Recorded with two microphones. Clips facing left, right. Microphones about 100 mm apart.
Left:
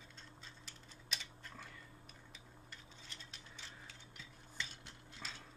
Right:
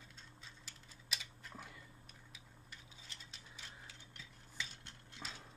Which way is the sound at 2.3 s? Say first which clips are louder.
Left 1 dB; 5° right (ahead or behind).